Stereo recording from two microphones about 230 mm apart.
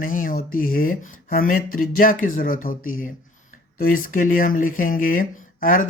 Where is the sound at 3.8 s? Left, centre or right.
Left.